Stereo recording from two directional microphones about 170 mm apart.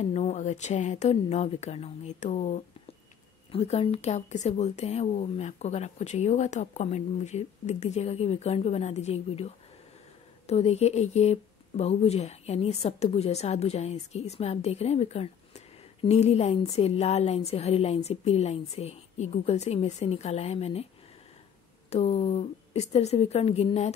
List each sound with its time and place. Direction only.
0.0 s speech: 40° left (ahead or behind)
21.9 s speech: 40° left (ahead or behind)